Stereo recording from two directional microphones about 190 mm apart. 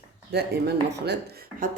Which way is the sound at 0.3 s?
60° right (ahead or behind).